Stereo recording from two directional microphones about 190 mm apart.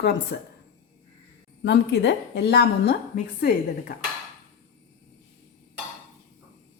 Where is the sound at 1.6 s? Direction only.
60° left (ahead or behind).